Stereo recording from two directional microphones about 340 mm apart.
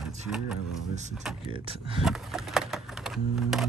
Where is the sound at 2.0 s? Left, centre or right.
Centre.